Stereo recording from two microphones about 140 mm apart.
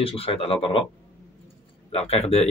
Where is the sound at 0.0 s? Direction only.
45° left (ahead or behind).